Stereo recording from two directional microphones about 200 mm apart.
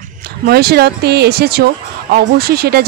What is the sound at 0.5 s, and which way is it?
Speech, 50° right (ahead or behind).